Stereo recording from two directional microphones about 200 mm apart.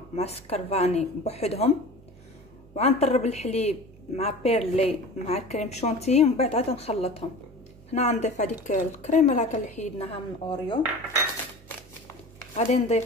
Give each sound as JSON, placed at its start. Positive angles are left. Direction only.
{"t": 0.1, "sound": "a woman's voice", "side_deg": 30}
{"t": 2.7, "sound": "a woman's voice", "side_deg": 30}
{"t": 12.5, "sound": "a woman's voice", "side_deg": 35}